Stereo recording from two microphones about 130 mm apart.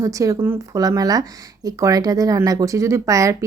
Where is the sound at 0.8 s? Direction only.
30° right (ahead or behind).